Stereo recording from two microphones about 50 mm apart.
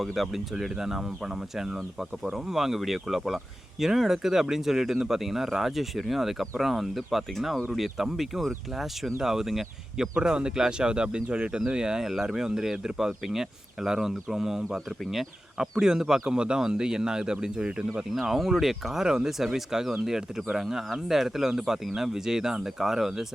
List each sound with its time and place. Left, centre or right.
0.0 s speech: centre
10.2 s speech: centre
18.1 s speech: centre